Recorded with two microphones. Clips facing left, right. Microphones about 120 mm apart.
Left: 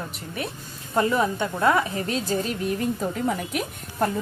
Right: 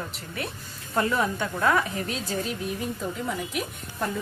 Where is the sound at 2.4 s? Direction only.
5° right (ahead or behind).